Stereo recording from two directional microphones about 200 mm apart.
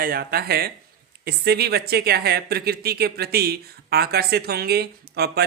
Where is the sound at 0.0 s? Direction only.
50° right (ahead or behind).